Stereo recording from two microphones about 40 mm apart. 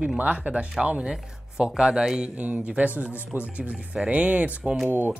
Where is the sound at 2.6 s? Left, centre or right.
Right.